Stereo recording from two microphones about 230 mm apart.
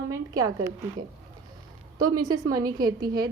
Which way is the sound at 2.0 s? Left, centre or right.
Right.